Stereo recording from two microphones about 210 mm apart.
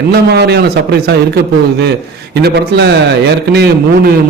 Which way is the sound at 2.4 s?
50° right (ahead or behind).